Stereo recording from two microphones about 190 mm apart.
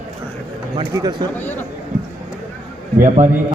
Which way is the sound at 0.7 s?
20° right (ahead or behind).